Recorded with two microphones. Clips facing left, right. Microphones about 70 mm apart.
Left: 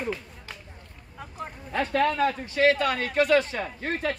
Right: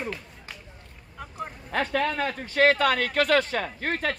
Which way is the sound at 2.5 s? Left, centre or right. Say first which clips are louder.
Right 2 dB; right.